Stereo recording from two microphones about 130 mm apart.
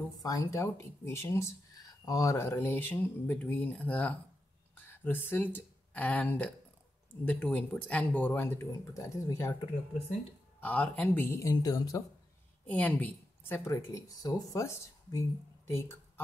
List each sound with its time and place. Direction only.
0.2 s a woman's voice: 25° left (ahead or behind)
10.6 s speech: 10° left (ahead or behind)
11.5 s a woman's voice: 30° left (ahead or behind)
12.6 s a woman's voice: 15° left (ahead or behind)